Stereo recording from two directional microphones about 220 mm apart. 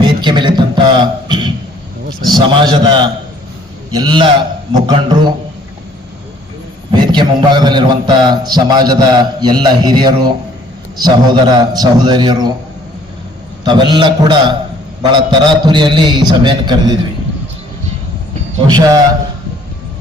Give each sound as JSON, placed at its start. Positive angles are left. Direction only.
{"t": 0.0, "sound": "a sound", "side_deg": -20}
{"t": 2.2, "sound": "a man's voice", "side_deg": -20}
{"t": 6.9, "sound": "a man's voice", "side_deg": -20}
{"t": 13.7, "sound": "a man's voice", "side_deg": -20}
{"t": 18.7, "sound": "a man's voice", "side_deg": -15}